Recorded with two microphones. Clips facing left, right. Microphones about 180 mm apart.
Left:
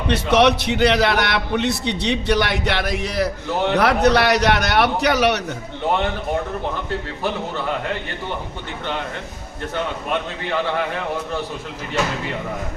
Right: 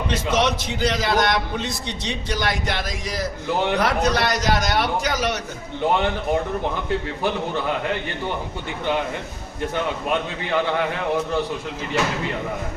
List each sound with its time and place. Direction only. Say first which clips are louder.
0.1 s a man's voice: left 7 dB; 65° left (ahead or behind)